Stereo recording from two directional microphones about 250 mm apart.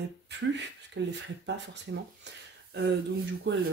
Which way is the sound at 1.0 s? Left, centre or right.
Right.